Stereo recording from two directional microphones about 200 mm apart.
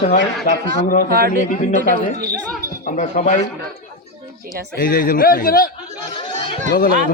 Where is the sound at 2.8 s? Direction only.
40° left (ahead or behind).